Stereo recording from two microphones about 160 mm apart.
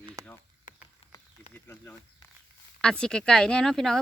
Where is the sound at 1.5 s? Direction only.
10° left (ahead or behind).